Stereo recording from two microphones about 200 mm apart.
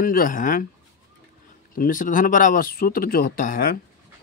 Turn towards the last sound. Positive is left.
turn(degrees=45)  # may be behind; listen again after turning